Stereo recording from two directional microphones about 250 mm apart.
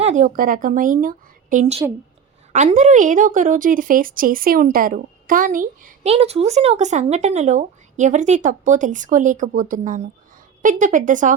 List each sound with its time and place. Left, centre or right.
0.0 s speech: right